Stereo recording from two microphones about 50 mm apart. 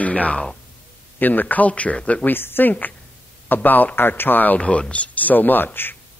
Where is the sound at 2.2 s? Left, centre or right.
Left.